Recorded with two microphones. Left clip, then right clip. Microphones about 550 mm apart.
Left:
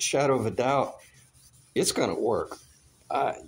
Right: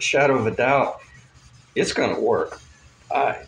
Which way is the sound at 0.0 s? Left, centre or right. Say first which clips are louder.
Right 6 dB; left.